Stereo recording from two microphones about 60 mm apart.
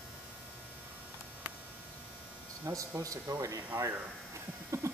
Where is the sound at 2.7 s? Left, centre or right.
Right.